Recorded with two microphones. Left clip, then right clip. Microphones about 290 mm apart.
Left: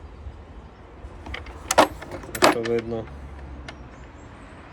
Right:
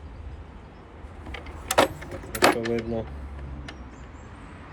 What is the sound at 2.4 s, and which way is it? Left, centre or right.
Keys jangling, centre.